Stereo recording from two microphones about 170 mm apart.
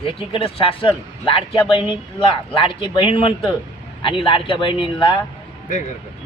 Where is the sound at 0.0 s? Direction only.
30° left (ahead or behind).